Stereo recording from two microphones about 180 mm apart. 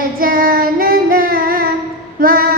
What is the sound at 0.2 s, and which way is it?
Child singing, 55° right (ahead or behind).